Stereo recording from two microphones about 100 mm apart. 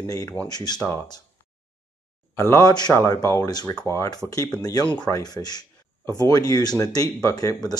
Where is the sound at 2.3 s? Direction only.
30° left (ahead or behind).